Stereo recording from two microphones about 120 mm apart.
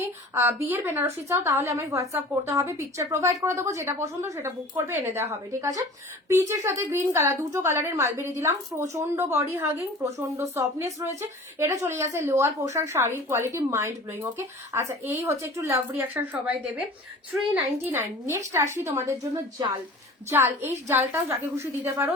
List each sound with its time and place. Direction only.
0.3 s a woman's voice: 20° right (ahead or behind)
17.8 s a woman's voice: 20° right (ahead or behind)
20.3 s a woman's voice: 20° right (ahead or behind)